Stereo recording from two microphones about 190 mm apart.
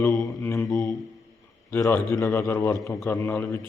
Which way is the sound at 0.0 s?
15° left (ahead or behind).